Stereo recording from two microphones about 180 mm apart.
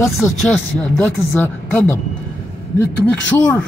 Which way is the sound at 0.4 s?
5° left (ahead or behind).